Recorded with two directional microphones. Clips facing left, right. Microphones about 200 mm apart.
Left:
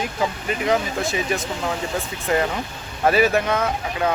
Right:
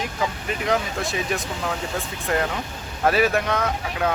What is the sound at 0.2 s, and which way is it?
Speech, centre (ahead or behind).